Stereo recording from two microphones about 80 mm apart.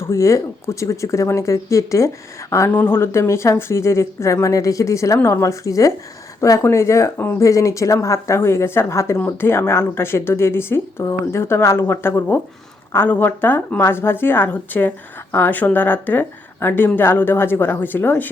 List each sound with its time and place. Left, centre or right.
0.0 s speech: left
2.7 s a woman's voice: left